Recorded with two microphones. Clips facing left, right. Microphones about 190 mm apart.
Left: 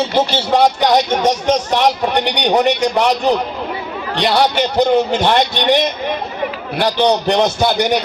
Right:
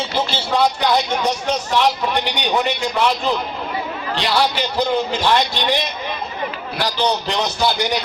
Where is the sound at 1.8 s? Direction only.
65° left (ahead or behind).